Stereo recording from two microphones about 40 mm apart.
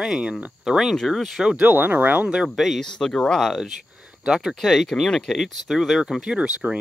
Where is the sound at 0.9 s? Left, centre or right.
Centre.